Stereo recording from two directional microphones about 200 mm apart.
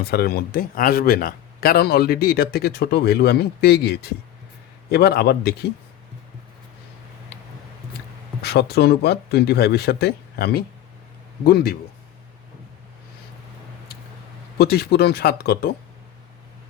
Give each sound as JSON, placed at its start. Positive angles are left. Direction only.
{"t": 0.0, "sound": "speech", "side_deg": 50}
{"t": 8.4, "sound": "speech", "side_deg": 55}
{"t": 14.6, "sound": "speech", "side_deg": 50}